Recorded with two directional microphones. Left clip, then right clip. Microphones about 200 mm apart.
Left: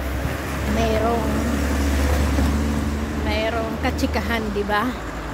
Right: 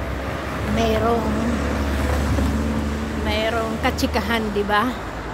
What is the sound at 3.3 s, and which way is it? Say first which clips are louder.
Speech: right 2 dB; 5° right (ahead or behind).